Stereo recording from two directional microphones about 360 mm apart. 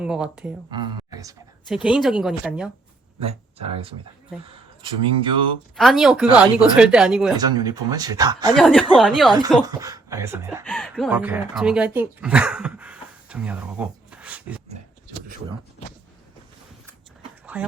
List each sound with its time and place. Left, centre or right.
0.0 s speech: centre
0.7 s speech: centre
3.2 s speech: centre
5.7 s speech: centre
17.4 s a sound: centre